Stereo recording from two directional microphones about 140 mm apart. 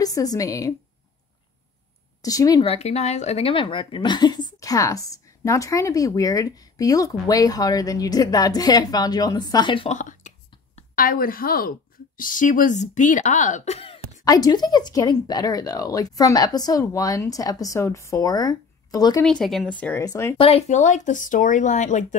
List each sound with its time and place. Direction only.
0.0 s speech: 25° left (ahead or behind)
2.2 s speech: 25° left (ahead or behind)
2.6 s speech: 45° left (ahead or behind)
9.8 s speech: 60° left (ahead or behind)
11.0 s a woman's voice: 90° left
12.2 s speech: 70° left (ahead or behind); by 14.0 s 45° left (ahead or behind)
14.2 s speech: 25° left (ahead or behind)
19.2 s speech: centre (ahead or behind); by 20.3 s 20° left (ahead or behind)
20.3 s speech: 45° left (ahead or behind)